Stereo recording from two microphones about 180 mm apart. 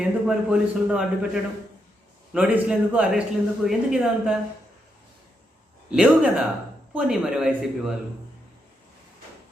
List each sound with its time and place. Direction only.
0.0 s speech: 5° right (ahead or behind)
5.9 s speech: 5° right (ahead or behind)